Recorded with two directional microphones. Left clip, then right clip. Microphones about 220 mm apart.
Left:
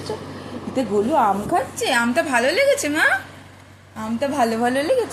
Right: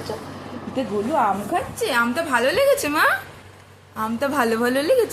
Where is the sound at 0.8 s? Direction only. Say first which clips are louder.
Left 3 dB; 15° left (ahead or behind).